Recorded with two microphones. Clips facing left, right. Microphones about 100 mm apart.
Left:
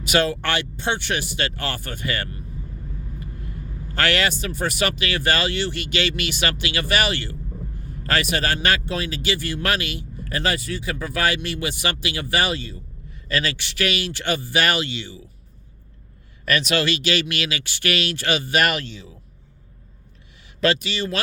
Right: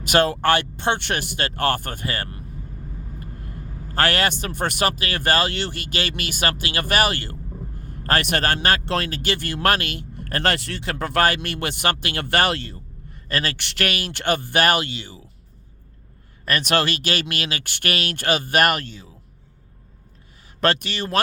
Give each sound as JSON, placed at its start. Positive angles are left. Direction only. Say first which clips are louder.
{"t": 0.0, "sound": "speech", "louder": "right 3 dB", "side_deg": -50}
{"t": 3.2, "sound": "vehicle", "louder": "left 1 dB", "side_deg": -45}
{"t": 4.3, "sound": "speech", "louder": "even", "side_deg": -55}
{"t": 4.9, "sound": "speech", "louder": "right 1 dB", "side_deg": -40}
{"t": 8.9, "sound": "speech", "louder": "right 1 dB", "side_deg": -60}
{"t": 16.5, "sound": "speech", "louder": "even", "side_deg": -50}
{"t": 20.6, "sound": "speech", "louder": "even", "side_deg": -50}